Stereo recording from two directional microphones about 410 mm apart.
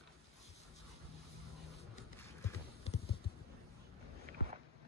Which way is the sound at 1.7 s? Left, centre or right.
Centre.